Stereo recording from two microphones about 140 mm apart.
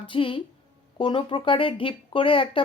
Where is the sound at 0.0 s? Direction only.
40° left (ahead or behind).